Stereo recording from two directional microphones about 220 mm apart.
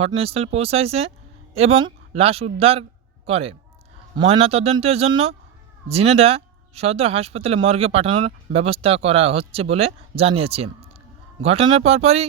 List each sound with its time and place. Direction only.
0.0 s speech: 25° right (ahead or behind)